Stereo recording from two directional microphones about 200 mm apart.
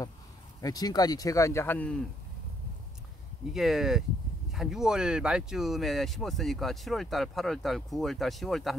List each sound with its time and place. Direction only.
0.6 s speech: 20° left (ahead or behind)
3.5 s speech: centre (ahead or behind)